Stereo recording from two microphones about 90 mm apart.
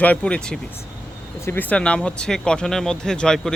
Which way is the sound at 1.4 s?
30° left (ahead or behind).